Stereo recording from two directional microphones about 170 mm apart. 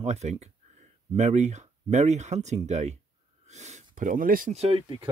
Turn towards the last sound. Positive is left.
turn(degrees=-30)  # may be behind; listen again after turning